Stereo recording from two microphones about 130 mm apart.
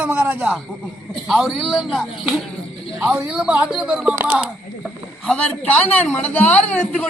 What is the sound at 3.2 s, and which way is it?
Speech, 5° right (ahead or behind).